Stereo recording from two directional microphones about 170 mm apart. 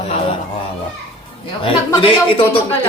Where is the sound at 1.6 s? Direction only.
30° left (ahead or behind).